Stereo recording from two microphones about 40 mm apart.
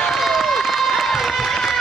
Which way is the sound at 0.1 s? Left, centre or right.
Centre.